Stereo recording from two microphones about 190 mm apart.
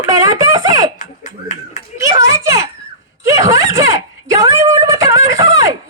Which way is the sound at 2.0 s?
15° right (ahead or behind).